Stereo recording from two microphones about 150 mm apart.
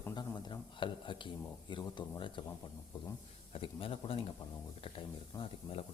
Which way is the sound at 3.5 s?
40° left (ahead or behind).